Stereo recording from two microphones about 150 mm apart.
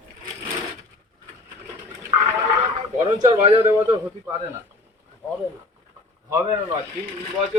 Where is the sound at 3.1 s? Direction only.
50° right (ahead or behind).